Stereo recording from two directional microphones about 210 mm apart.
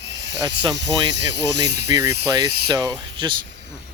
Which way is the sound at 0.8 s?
55° right (ahead or behind).